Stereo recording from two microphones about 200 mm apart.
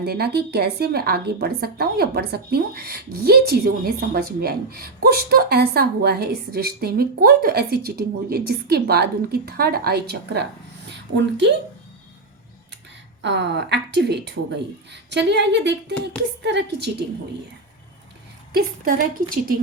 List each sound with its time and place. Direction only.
0.0 s a woman's voice: 55° right (ahead or behind)
13.2 s a woman's voice: 60° right (ahead or behind)
18.5 s a woman's voice: 45° right (ahead or behind)